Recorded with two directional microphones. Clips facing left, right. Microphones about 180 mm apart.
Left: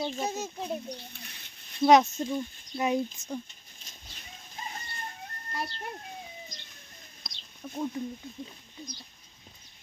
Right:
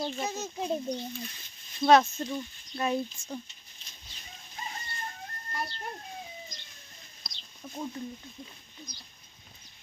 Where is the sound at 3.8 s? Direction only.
45° left (ahead or behind).